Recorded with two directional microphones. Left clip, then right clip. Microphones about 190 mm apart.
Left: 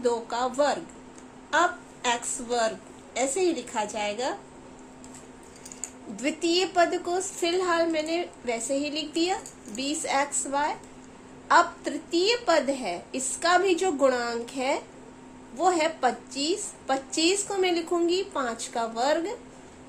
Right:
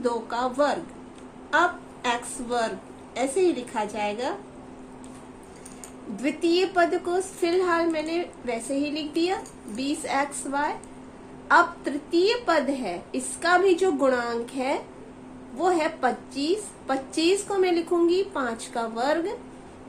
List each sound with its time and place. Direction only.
0.0 s a woman's voice: 20° left (ahead or behind)
6.1 s a woman's voice: 20° left (ahead or behind)